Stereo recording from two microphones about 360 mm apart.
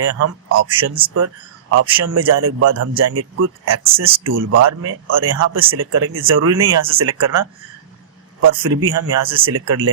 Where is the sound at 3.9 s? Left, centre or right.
Centre.